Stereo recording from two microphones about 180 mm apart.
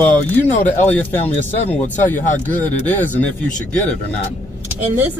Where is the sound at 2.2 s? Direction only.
45° left (ahead or behind).